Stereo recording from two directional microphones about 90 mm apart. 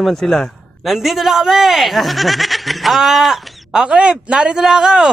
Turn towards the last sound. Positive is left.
turn(degrees=-5)  # may be behind; listen again after turning